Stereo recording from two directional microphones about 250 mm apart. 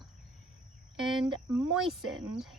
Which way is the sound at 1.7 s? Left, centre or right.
Centre.